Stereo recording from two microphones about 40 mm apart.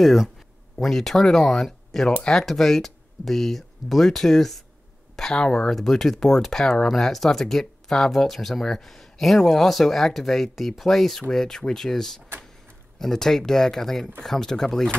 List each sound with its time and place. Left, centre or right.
0.8 s speech: centre